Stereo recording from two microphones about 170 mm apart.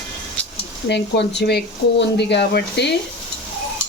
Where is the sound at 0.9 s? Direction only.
90° left.